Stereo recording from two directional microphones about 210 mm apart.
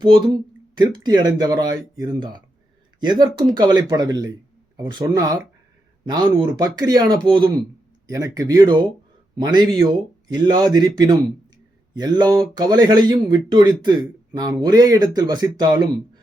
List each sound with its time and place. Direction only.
0.0 s speech: 20° right (ahead or behind)